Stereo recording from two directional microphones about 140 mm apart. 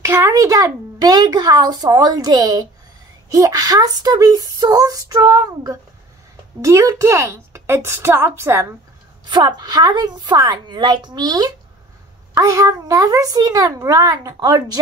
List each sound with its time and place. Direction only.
0.0 s a woman's voice: 20° right (ahead or behind)
9.3 s a woman's voice: 30° right (ahead or behind)